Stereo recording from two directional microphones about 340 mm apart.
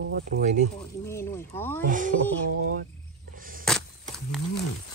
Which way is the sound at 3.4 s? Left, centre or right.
Right.